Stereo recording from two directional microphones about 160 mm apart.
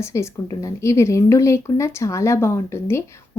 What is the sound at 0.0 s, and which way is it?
A woman's voice, 15° left (ahead or behind).